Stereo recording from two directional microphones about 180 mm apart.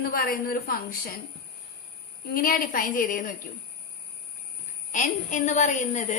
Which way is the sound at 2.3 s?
55° left (ahead or behind).